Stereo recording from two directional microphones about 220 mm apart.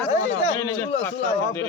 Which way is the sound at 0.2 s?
60° left (ahead or behind).